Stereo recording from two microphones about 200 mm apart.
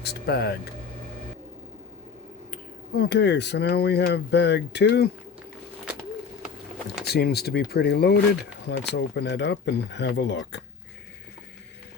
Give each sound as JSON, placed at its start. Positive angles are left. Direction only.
{"t": 0.0, "sound": "speech", "side_deg": 55}
{"t": 2.5, "sound": "speech", "side_deg": 50}
{"t": 7.0, "sound": "speech", "side_deg": 55}